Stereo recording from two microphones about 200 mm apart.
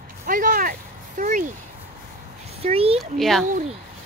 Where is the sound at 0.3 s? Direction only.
45° right (ahead or behind).